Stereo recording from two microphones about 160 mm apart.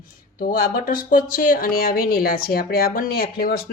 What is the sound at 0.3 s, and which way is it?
Speech, 65° left (ahead or behind).